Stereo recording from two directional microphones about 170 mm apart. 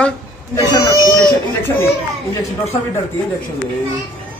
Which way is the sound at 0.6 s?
20° left (ahead or behind).